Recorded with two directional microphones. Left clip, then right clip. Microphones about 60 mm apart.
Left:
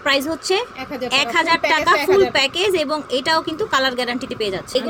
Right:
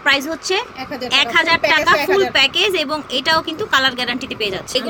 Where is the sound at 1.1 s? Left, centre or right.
Left.